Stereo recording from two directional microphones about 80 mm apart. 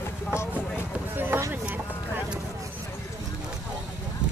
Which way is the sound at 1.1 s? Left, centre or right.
Right.